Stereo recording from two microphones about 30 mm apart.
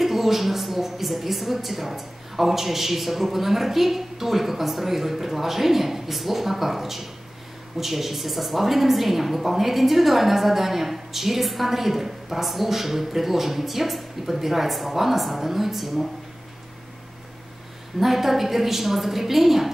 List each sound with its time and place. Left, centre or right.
0.0 s a woman's voice: centre
17.9 s a woman's voice: centre